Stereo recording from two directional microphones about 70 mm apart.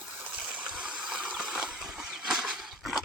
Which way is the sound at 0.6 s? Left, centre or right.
Centre.